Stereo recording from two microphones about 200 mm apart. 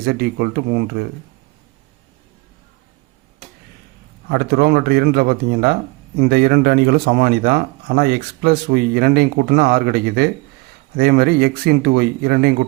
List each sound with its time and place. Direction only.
0.0 s speech: 50° right (ahead or behind)
4.3 s speech: 50° right (ahead or behind)